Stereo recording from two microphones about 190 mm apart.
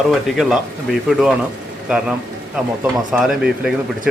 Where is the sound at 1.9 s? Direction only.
5° right (ahead or behind).